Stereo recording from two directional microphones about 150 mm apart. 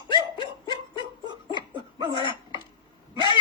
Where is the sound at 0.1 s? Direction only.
30° left (ahead or behind).